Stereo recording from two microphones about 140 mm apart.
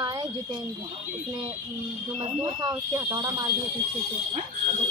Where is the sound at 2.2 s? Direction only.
35° right (ahead or behind).